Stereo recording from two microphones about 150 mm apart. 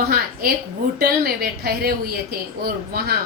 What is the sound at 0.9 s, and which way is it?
A woman's voice, 90° right.